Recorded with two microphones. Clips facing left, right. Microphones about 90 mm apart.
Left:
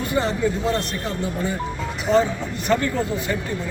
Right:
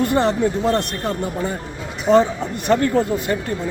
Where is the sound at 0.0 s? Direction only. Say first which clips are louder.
Right 4 dB; 60° right (ahead or behind).